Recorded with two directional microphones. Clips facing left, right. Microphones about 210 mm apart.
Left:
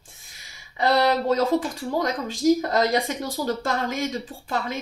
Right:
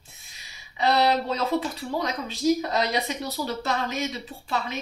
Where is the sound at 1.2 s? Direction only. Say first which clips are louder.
Left 5 dB; 45° left (ahead or behind).